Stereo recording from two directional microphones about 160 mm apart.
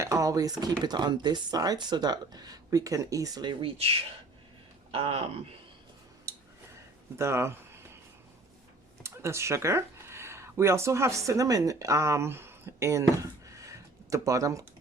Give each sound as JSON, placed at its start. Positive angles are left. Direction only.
{"t": 0.0, "sound": "speech", "side_deg": -20}
{"t": 6.3, "sound": "a sound", "side_deg": -20}
{"t": 7.2, "sound": "speech", "side_deg": -15}
{"t": 9.0, "sound": "speech", "side_deg": -15}